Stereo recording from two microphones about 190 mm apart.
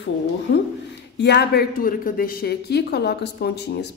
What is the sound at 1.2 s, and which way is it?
Speech, 65° left (ahead or behind).